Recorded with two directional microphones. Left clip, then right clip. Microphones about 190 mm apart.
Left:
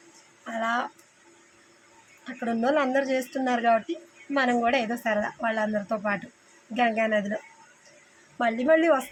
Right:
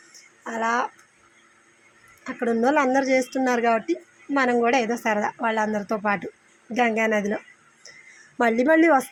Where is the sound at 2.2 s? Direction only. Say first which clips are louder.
Right 5 dB; 20° right (ahead or behind).